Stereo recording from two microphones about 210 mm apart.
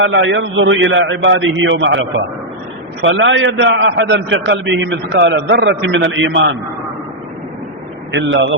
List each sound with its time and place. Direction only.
0.0 s a man's voice: 60° right (ahead or behind)
8.1 s a man's voice: 65° right (ahead or behind)